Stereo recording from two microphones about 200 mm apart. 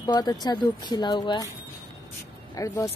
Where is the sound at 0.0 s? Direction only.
20° left (ahead or behind).